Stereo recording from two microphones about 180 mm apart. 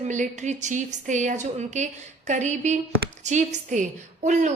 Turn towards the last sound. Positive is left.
turn(degrees=-40)  # may be behind; listen again after turning